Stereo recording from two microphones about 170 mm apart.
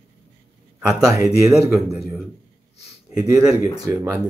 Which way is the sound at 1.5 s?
Centre (ahead or behind).